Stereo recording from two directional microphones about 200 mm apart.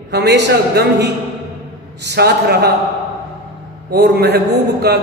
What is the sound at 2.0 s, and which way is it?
Speech, 55° right (ahead or behind).